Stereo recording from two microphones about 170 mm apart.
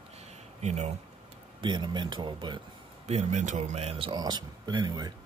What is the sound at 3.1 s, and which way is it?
Speech, 40° right (ahead or behind).